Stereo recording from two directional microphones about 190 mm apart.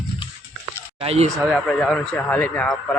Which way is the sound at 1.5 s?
5° left (ahead or behind).